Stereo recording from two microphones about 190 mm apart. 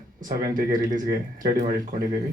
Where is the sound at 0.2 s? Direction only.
45° right (ahead or behind).